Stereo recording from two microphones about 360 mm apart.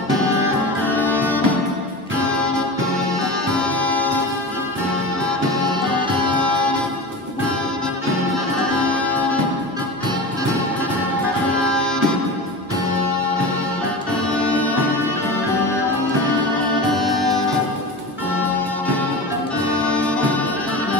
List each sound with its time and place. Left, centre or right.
0.9 s music: centre
3.5 s music: centre
8.9 s music: centre
11.6 s music: centre
14.3 s music: centre
16.9 s music: centre
19.8 s music: centre